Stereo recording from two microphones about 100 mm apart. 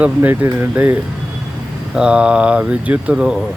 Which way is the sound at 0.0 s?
20° right (ahead or behind).